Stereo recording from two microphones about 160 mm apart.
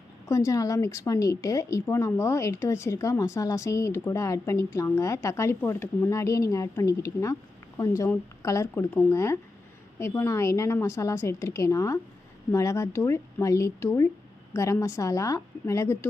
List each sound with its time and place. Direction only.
0.3 s a woman's voice: 20° left (ahead or behind)